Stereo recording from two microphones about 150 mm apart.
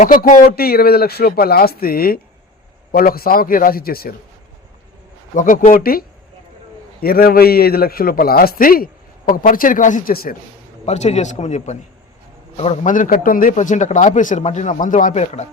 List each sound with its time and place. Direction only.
0.0 s a man's voice: 60° left (ahead or behind); by 4.1 s 90° left
5.3 s a man's voice: 60° left (ahead or behind); by 10.3 s 75° left (ahead or behind)
10.8 s a man's voice: 50° left (ahead or behind)
12.9 s speech: 60° left (ahead or behind)